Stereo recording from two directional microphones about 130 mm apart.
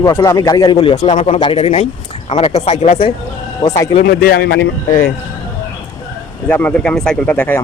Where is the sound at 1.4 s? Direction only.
45° left (ahead or behind).